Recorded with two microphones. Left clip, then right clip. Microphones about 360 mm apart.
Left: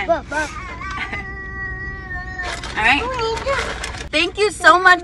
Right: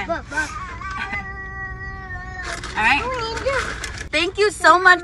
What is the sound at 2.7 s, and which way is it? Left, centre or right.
Speech, centre.